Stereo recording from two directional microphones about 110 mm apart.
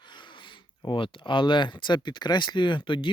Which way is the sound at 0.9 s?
50° left (ahead or behind).